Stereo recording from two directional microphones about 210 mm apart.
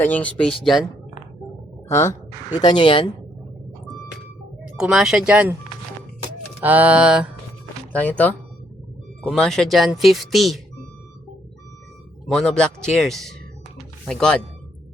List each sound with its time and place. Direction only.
0.0 s speech: 5° left (ahead or behind)
1.9 s speech: 15° left (ahead or behind)
4.8 s speech: 5° right (ahead or behind)
6.6 s music: 5° right (ahead or behind)
7.9 s speech: 5° left (ahead or behind)
12.3 s speech: 5° left (ahead or behind)